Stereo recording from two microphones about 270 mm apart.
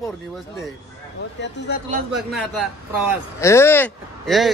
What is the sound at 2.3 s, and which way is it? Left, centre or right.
Speech, centre.